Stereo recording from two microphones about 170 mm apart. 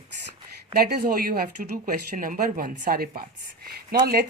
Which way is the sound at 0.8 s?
65° right (ahead or behind).